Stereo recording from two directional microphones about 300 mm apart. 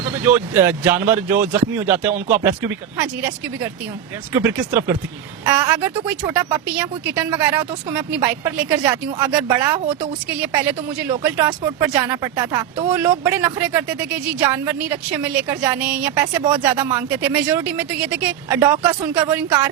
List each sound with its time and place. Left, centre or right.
0.0 s a woman's voice: centre